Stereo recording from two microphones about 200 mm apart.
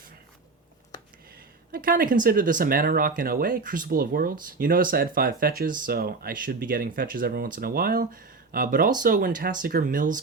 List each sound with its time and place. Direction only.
1.7 s speech: 45° right (ahead or behind)